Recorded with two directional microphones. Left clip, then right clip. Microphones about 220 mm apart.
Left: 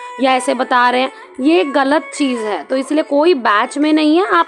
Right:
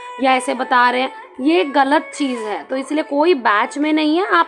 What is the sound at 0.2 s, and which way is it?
A woman's voice, 20° left (ahead or behind).